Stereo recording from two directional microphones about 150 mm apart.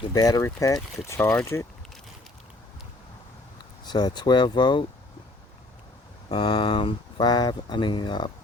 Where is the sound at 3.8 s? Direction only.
30° left (ahead or behind).